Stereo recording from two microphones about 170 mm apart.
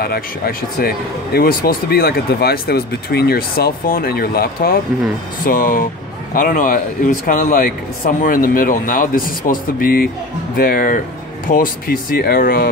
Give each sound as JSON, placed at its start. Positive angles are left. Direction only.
{"t": 0.0, "sound": "speech", "side_deg": 65}